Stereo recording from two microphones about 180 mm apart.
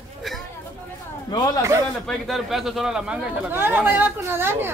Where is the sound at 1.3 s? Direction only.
20° left (ahead or behind).